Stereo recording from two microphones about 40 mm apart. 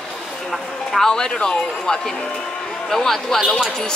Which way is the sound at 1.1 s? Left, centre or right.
Centre.